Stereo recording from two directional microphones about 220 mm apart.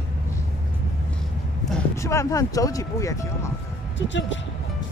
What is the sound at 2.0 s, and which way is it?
Speech, 15° left (ahead or behind).